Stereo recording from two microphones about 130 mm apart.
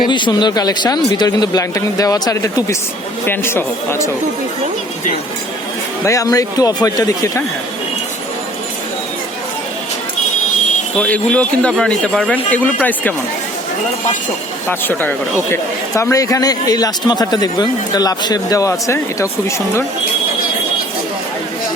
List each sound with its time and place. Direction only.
0.1 s a man's voice: 35° left (ahead or behind); by 4.1 s 20° left (ahead or behind)
6.1 s a man's voice: 25° left (ahead or behind)
11.0 s speech: 10° left (ahead or behind)
14.7 s a man's voice: 15° left (ahead or behind)